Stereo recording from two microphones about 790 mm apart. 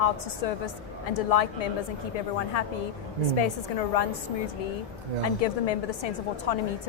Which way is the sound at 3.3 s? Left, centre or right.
Left.